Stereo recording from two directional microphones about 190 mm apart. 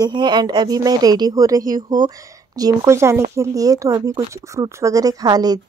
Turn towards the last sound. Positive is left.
turn(degrees=-20)  # may be behind; listen again after turning